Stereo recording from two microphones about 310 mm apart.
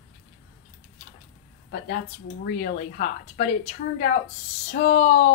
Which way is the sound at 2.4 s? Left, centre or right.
Left.